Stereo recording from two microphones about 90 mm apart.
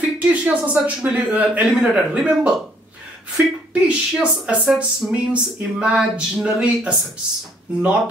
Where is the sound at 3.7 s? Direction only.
15° right (ahead or behind).